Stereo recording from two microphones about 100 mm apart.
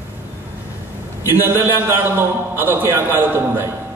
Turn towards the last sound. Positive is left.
turn(degrees=-20)  # may be behind; listen again after turning